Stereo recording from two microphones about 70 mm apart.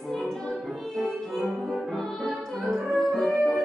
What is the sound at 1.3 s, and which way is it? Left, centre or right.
Music, right.